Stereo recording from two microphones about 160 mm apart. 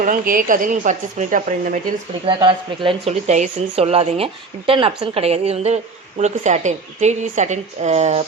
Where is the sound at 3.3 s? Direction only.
45° right (ahead or behind).